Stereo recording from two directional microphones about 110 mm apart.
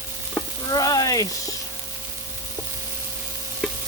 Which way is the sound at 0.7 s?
35° left (ahead or behind).